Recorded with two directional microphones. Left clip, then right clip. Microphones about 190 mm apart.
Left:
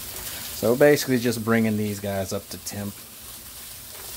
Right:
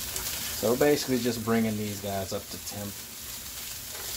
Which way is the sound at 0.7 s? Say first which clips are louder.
Left 8 dB; 50° left (ahead or behind).